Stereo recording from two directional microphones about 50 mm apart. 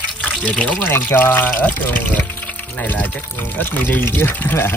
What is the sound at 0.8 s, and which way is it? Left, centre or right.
Speech, left.